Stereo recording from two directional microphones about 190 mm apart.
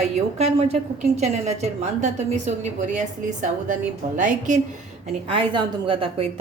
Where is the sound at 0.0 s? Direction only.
35° right (ahead or behind).